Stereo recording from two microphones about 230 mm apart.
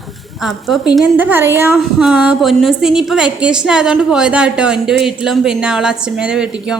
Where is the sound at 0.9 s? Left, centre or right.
Centre.